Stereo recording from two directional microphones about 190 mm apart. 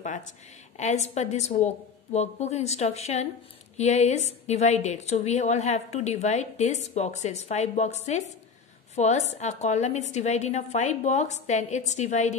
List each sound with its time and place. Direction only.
0.7 s a woman's voice: 35° left (ahead or behind)